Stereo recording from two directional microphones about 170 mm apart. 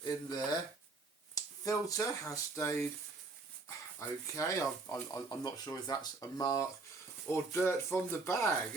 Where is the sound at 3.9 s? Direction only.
20° left (ahead or behind).